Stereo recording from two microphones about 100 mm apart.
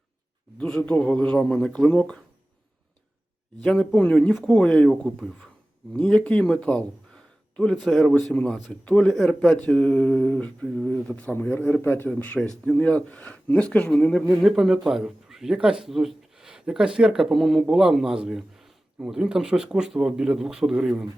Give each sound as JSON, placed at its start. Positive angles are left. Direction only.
{"t": 0.6, "sound": "speech", "side_deg": 10}
{"t": 3.6, "sound": "a man's voice", "side_deg": 10}
{"t": 12.4, "sound": "a man's voice", "side_deg": 5}
{"t": 14.3, "sound": "a man's voice", "side_deg": 0}